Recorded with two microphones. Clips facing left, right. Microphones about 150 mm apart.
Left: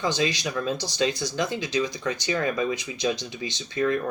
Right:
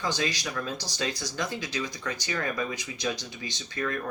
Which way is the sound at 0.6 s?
25° left (ahead or behind).